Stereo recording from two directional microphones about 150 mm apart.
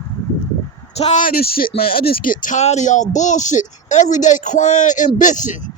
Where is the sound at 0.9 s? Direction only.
45° left (ahead or behind).